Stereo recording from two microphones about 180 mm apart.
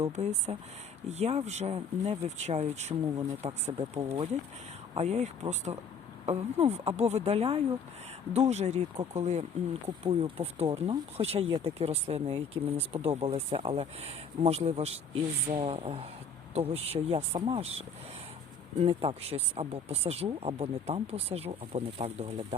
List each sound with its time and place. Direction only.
0.0 s speech: 35° right (ahead or behind)